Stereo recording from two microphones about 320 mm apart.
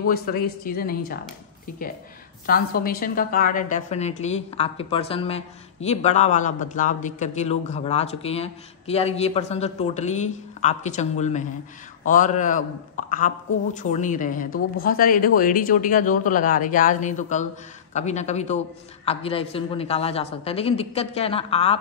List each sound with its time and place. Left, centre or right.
0.0 s a woman's voice: left
2.4 s a woman's voice: left